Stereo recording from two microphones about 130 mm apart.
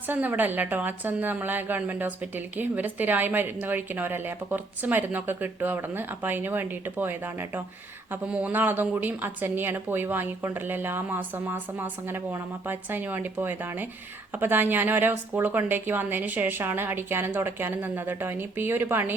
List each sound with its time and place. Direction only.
0.1 s a woman's voice: 15° right (ahead or behind)